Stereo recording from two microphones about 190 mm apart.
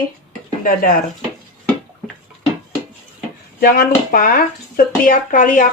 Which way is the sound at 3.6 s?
50° left (ahead or behind).